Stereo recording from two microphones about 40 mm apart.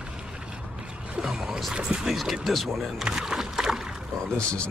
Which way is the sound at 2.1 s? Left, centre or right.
Centre.